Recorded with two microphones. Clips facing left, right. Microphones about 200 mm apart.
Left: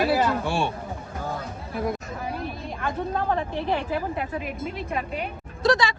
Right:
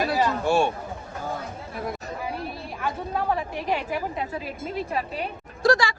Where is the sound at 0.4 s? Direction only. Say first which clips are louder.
Right 4 dB; 45° right (ahead or behind).